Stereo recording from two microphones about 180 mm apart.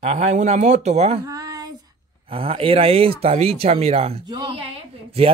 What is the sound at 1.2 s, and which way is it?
Child singing, 20° right (ahead or behind).